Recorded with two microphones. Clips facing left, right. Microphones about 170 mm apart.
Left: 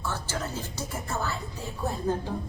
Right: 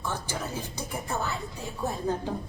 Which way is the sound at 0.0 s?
15° right (ahead or behind).